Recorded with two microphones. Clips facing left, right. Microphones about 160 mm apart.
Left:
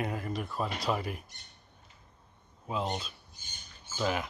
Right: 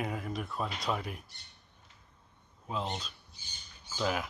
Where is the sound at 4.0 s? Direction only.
Centre (ahead or behind).